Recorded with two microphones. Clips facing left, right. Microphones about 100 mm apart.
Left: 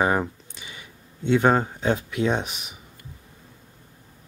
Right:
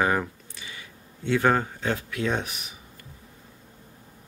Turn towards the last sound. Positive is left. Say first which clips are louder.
# left 1 dB
turn(degrees=20)  # may be behind; listen again after turning